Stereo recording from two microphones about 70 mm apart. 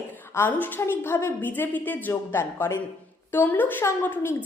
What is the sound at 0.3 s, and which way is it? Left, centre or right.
A woman's voice, left.